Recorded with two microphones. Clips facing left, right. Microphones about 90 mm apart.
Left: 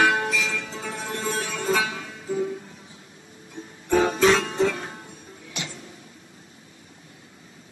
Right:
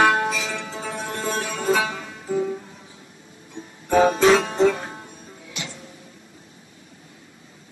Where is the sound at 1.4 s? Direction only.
15° right (ahead or behind).